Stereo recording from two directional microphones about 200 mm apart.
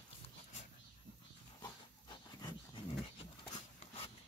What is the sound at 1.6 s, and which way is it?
Dog, 20° left (ahead or behind).